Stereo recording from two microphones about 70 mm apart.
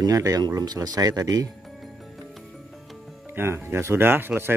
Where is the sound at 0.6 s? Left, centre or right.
Right.